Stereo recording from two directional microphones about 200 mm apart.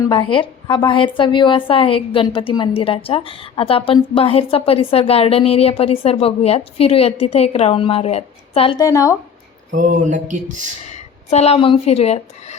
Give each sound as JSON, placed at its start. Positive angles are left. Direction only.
{"t": 0.0, "sound": "a woman's voice", "side_deg": 25}
{"t": 8.8, "sound": "speech", "side_deg": 15}
{"t": 9.7, "sound": "a sound", "side_deg": -40}
{"t": 10.8, "sound": "speech", "side_deg": 35}